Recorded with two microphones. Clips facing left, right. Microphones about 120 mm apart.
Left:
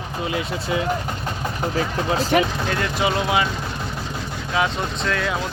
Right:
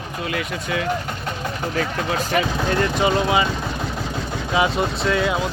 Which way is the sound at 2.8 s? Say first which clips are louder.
Right 3 dB; centre (ahead or behind).